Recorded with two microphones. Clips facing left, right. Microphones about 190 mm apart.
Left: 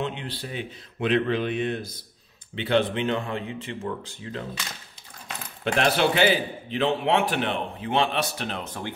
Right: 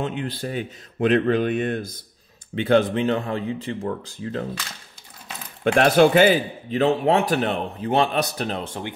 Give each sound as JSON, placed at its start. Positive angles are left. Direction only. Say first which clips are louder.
{"t": 0.0, "sound": "speech", "louder": "right 4 dB", "side_deg": -45}
{"t": 5.6, "sound": "speech", "louder": "right 7 dB", "side_deg": -50}